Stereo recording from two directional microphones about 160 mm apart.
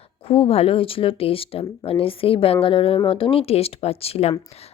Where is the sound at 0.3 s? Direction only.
35° left (ahead or behind).